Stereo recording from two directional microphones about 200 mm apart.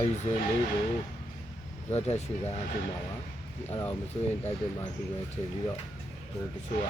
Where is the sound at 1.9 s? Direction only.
35° left (ahead or behind).